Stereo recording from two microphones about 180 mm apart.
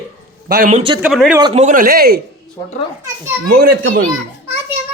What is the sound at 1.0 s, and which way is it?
Speech, 5° right (ahead or behind).